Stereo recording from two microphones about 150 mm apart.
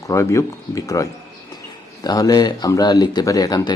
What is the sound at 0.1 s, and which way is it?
Speech, 20° left (ahead or behind).